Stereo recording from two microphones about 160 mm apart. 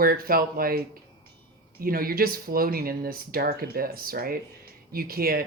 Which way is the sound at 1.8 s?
65° right (ahead or behind).